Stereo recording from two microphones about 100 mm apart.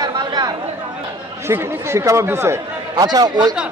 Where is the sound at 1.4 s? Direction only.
25° right (ahead or behind).